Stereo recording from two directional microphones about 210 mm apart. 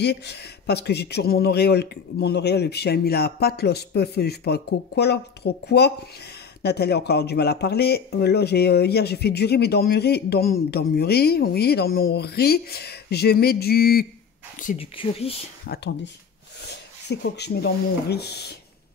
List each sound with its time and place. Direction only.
0.0 s speech: 50° left (ahead or behind)
14.8 s speech: 25° left (ahead or behind)
15.6 s speech: 50° left (ahead or behind)
17.1 s speech: 55° left (ahead or behind)